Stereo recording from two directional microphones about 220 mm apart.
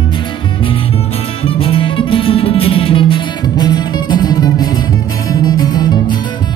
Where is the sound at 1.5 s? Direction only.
25° left (ahead or behind).